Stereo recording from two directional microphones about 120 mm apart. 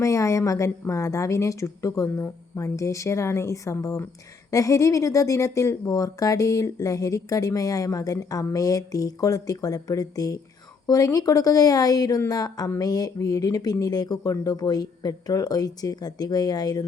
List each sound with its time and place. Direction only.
0.0 s speech: 25° left (ahead or behind)